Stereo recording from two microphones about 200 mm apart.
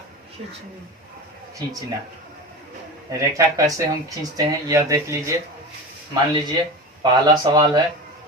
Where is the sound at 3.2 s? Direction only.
15° right (ahead or behind).